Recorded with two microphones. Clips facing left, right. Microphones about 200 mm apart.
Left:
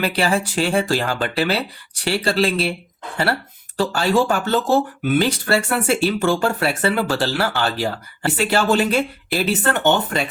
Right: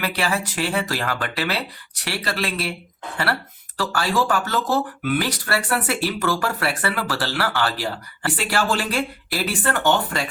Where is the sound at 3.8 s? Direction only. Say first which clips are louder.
Left 5 dB; 25° left (ahead or behind).